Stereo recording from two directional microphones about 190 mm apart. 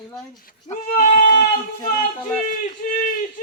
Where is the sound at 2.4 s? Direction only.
40° left (ahead or behind).